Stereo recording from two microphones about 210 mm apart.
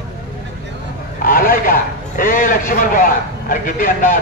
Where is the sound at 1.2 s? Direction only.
45° left (ahead or behind).